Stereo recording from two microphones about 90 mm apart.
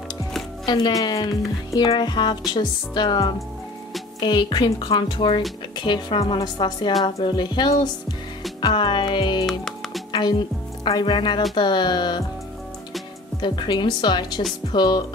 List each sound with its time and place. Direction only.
0.7 s speech: 50° left (ahead or behind)
4.2 s speech: 65° left (ahead or behind)
4.7 s a woman's voice: 75° left (ahead or behind); by 6.4 s 90° left
6.4 s speech: 55° left (ahead or behind)
9.5 s music: 5° left (ahead or behind)
10.9 s speech: 55° left (ahead or behind)
13.4 s speech: 55° left (ahead or behind)